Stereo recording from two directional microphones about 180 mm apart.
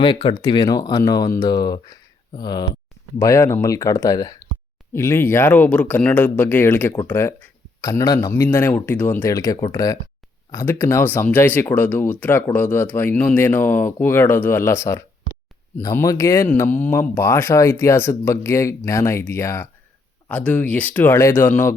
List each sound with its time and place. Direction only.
0.0 s speech: 25° left (ahead or behind)